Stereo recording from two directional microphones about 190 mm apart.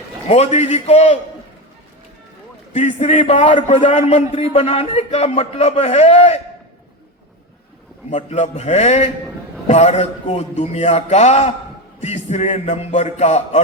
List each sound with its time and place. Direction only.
0.3 s a man's voice: 35° left (ahead or behind)
2.7 s a man's voice: 35° left (ahead or behind)
8.1 s a man's voice: 35° left (ahead or behind)